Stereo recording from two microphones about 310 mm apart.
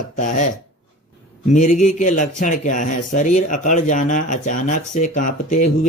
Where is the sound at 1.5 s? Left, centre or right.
Left.